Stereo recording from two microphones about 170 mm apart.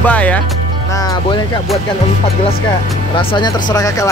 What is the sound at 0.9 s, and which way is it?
Speech, 20° left (ahead or behind).